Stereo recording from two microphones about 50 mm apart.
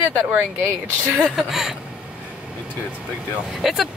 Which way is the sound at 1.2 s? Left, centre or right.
Centre.